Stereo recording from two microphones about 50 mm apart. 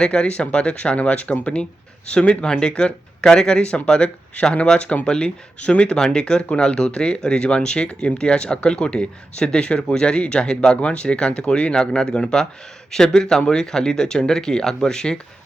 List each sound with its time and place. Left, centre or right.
0.0 s speech: centre